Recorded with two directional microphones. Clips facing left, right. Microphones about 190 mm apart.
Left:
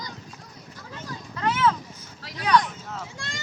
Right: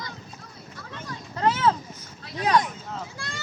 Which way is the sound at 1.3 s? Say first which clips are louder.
Right 1 dB; 30° right (ahead or behind).